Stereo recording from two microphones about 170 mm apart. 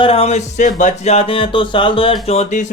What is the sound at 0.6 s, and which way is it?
Speech, 45° left (ahead or behind).